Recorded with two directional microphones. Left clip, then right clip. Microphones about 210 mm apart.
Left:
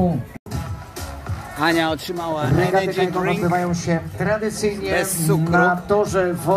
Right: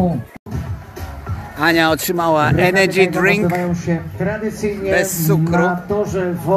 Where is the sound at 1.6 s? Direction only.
10° right (ahead or behind).